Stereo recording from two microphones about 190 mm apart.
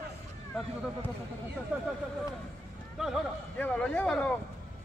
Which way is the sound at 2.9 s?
Centre (ahead or behind).